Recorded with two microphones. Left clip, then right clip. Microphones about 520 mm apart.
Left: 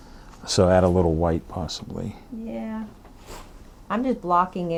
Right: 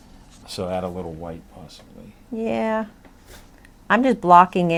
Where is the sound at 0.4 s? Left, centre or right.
Left.